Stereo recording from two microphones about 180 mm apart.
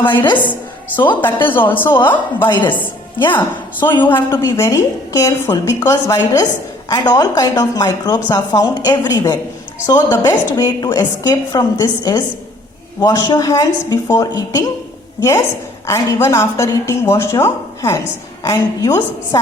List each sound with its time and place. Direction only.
1.2 s a woman's voice: 10° left (ahead or behind)
4.0 s a woman's voice: 15° left (ahead or behind)